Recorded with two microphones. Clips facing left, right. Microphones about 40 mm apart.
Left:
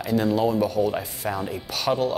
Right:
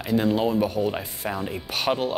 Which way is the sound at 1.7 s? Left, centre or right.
Right.